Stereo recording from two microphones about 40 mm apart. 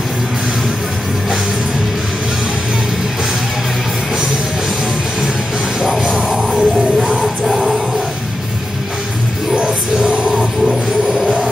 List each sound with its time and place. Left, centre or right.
5.9 s music: centre
9.6 s music: right
10.6 s a sound: centre